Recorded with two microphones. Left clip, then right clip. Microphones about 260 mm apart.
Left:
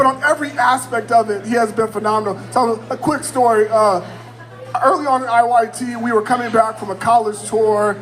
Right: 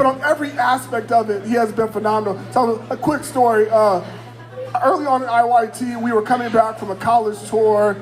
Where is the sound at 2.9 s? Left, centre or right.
Left.